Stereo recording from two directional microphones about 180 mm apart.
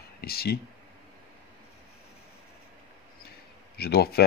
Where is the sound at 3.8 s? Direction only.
60° left (ahead or behind).